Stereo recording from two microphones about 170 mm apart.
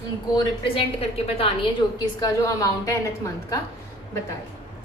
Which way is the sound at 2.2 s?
20° left (ahead or behind).